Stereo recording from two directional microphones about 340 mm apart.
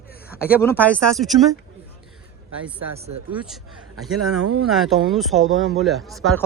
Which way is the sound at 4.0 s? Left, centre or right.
Right.